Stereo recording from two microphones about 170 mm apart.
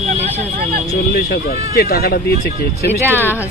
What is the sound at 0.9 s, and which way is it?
Speech, 70° left (ahead or behind).